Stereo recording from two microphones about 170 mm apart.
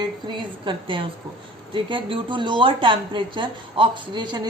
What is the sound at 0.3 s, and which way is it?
A woman's voice, 30° right (ahead or behind).